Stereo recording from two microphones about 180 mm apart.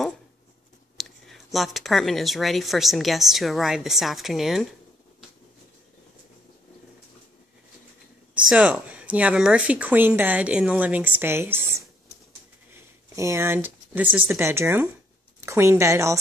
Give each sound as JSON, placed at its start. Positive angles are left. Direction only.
{"t": 0.9, "sound": "speech", "side_deg": 0}
{"t": 8.4, "sound": "speech", "side_deg": 0}
{"t": 12.7, "sound": "a sound", "side_deg": -15}
{"t": 14.1, "sound": "speech", "side_deg": -10}